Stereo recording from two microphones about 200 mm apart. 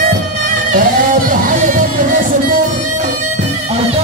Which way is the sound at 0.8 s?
45° right (ahead or behind).